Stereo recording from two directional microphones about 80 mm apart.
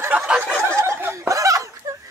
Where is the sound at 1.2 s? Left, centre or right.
Right.